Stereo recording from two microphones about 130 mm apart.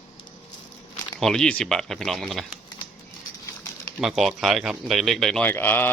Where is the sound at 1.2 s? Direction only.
5° left (ahead or behind).